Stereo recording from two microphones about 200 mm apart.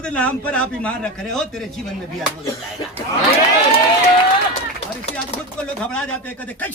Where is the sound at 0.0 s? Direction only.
5° left (ahead or behind).